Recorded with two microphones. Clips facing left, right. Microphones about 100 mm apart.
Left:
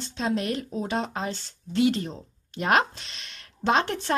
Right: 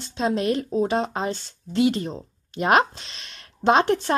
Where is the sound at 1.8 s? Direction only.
20° right (ahead or behind).